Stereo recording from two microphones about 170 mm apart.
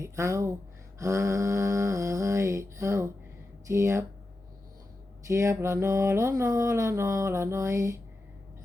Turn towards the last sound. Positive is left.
turn(degrees=-20)  # may be behind; listen again after turning